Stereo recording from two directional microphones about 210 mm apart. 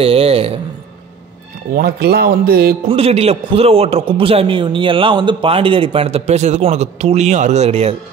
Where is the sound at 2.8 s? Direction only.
30° right (ahead or behind).